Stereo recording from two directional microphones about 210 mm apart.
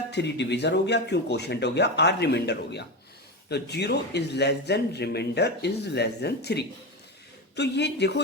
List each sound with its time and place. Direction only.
0.1 s a man's voice: 55° left (ahead or behind)